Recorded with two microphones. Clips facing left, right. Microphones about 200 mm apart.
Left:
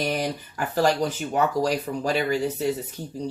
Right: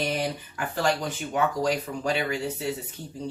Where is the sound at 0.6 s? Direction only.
40° left (ahead or behind).